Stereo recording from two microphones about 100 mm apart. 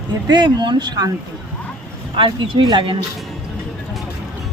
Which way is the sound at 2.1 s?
55° right (ahead or behind).